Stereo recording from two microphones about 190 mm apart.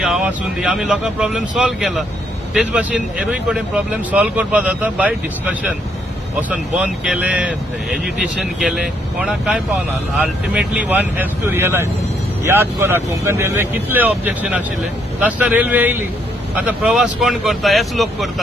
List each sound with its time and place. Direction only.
0.0 s speech: 5° right (ahead or behind)